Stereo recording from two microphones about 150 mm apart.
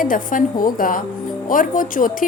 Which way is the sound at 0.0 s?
65° left (ahead or behind).